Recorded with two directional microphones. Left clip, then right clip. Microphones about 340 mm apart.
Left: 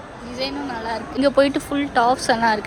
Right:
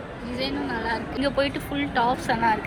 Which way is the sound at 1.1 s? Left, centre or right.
Left.